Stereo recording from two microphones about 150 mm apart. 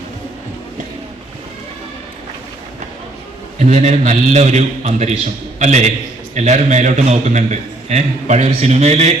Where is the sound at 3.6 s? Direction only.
50° right (ahead or behind).